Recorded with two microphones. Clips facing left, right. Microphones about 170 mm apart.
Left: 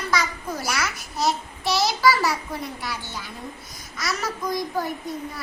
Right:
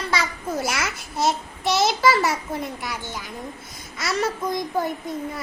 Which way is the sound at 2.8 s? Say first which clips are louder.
Right 1 dB; 20° right (ahead or behind).